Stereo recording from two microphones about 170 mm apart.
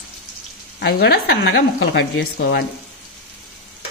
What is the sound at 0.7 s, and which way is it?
Speech, 70° left (ahead or behind).